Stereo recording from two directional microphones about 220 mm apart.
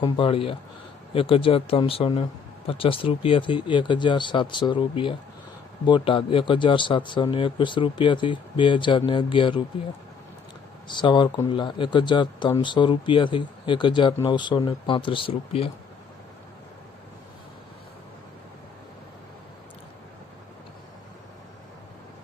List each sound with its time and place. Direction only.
0.0 s speech: 25° left (ahead or behind)
10.8 s speech: 20° left (ahead or behind)